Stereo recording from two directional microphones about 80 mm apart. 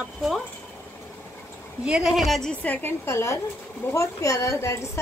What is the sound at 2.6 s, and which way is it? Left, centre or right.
Speech, left.